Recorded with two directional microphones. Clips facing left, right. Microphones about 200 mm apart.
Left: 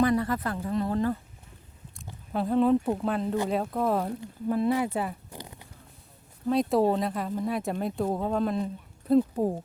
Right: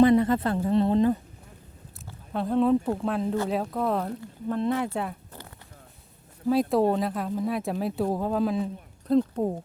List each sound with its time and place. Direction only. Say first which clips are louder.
0.0 s a woman's voice: right 6 dB; 25° right (ahead or behind)
2.3 s speech: even; centre (ahead or behind)
5.3 s a sound: left 3 dB; 15° left (ahead or behind)
6.5 s speech: right 1 dB; centre (ahead or behind)